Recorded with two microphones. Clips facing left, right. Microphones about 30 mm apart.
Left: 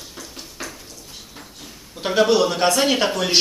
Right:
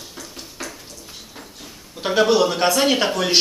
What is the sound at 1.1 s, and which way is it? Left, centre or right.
Speech, centre.